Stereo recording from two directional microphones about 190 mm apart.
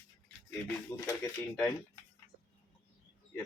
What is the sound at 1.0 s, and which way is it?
Speech, 20° left (ahead or behind).